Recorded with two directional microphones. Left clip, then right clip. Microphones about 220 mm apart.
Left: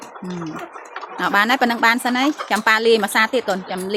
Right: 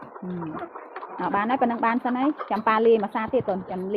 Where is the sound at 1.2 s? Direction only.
30° left (ahead or behind).